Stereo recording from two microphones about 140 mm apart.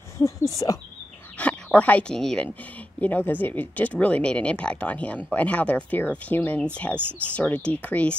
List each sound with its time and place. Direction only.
0.2 s speech: 20° left (ahead or behind)
1.4 s speech: 10° left (ahead or behind)
7.1 s speech: 15° right (ahead or behind)
7.3 s speech: 10° left (ahead or behind)